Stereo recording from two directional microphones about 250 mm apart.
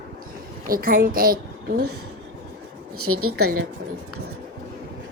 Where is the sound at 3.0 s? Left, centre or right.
Right.